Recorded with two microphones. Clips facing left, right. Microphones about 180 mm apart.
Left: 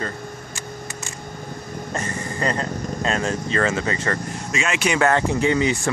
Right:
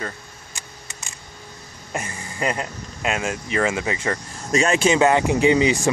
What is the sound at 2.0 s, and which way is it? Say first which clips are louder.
A man's voice: left 1 dB; 10° right (ahead or behind).